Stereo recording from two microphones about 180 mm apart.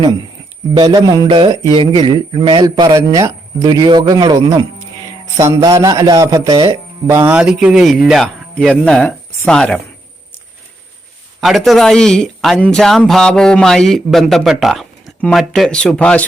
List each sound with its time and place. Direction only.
0.7 s a man's voice: 20° right (ahead or behind); by 9.8 s 5° left (ahead or behind)
11.3 s speech: centre (ahead or behind)